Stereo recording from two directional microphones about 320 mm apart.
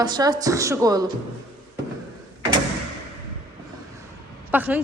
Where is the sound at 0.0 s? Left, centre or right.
Centre.